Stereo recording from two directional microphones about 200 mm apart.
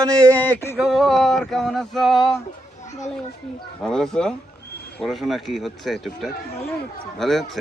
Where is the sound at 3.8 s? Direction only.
5° left (ahead or behind).